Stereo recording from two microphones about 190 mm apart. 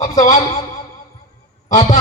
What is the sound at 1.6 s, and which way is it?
Speech, 40° left (ahead or behind).